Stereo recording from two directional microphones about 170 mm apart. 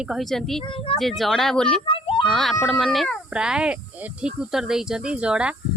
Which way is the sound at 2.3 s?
Centre (ahead or behind).